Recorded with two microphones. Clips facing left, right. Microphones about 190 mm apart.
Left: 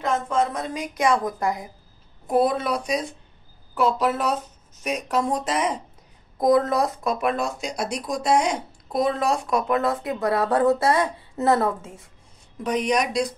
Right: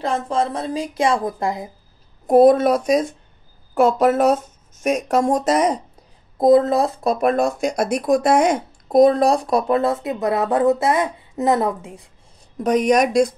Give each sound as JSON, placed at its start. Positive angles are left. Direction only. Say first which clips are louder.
{"t": 0.0, "sound": "a woman's voice", "louder": "right 2 dB", "side_deg": -30}
{"t": 2.2, "sound": "speech", "louder": "right 9 dB", "side_deg": -45}
{"t": 6.3, "sound": "speech", "louder": "right 5 dB", "side_deg": -25}
{"t": 12.5, "sound": "speech", "louder": "right 7 dB", "side_deg": -45}